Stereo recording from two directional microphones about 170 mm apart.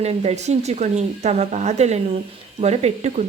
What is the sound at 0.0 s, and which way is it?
A woman's voice, 40° right (ahead or behind).